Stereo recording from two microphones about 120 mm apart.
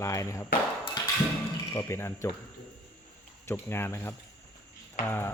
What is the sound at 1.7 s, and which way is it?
Speech, 25° left (ahead or behind).